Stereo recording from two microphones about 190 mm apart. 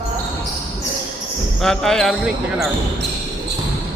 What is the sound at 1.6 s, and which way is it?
Speech, centre (ahead or behind).